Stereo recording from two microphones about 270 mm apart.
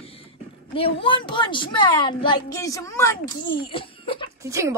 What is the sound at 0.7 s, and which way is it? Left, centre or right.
A woman's voice, centre.